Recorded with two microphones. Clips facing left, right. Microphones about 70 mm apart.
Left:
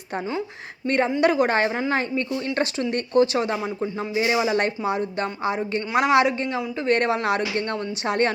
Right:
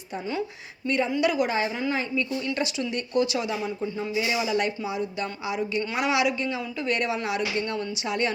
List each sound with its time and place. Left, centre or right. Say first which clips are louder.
0.9 s speech: left 4 dB; left